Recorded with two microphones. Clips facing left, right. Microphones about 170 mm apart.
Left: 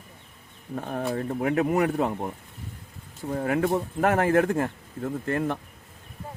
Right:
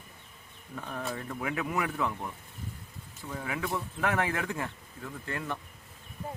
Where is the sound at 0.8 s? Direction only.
45° left (ahead or behind).